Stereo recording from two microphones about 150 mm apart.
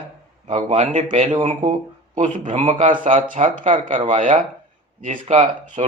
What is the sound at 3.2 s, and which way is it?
Speech, 60° right (ahead or behind).